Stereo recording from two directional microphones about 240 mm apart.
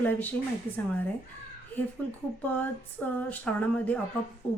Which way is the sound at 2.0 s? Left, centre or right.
Centre.